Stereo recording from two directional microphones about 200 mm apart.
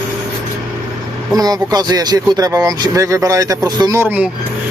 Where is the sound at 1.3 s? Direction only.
20° right (ahead or behind).